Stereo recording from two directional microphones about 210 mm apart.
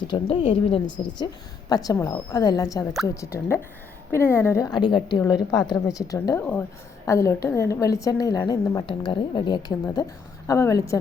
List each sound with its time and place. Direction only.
0.1 s a woman's voice: 25° left (ahead or behind)